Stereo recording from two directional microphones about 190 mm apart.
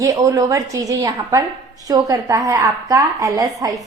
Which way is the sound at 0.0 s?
15° right (ahead or behind).